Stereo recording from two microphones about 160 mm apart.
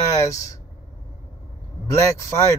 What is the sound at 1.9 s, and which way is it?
Speech, 20° left (ahead or behind).